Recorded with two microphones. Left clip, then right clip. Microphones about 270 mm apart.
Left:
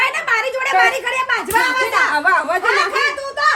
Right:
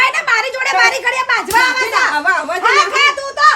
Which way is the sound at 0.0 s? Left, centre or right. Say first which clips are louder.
Right 4 dB; centre.